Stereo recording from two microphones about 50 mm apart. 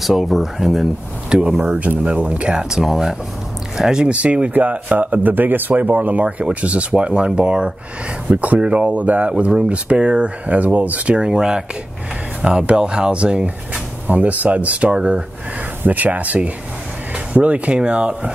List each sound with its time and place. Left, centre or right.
0.0 s speech: centre
1.7 s a man's voice: right
8.3 s speech: right
11.1 s speech: centre
14.0 s speech: right
15.8 s a man's voice: right